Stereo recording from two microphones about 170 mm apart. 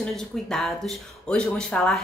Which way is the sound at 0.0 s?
5° left (ahead or behind).